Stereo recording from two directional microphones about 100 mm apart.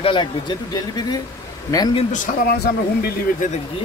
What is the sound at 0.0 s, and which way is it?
Speech, 55° left (ahead or behind).